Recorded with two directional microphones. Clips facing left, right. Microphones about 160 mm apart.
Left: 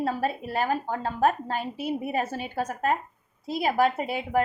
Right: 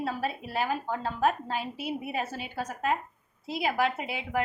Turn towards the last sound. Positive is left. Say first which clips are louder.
# left 5 dB
turn(degrees=45)  # may be behind; listen again after turning